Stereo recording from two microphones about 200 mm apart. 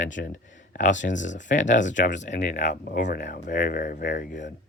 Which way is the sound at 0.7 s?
40° left (ahead or behind).